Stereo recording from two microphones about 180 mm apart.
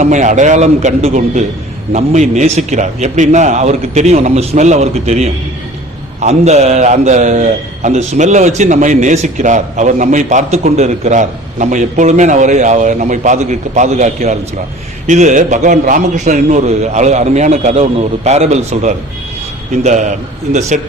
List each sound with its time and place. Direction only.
0.0 s a man's voice: 40° right (ahead or behind)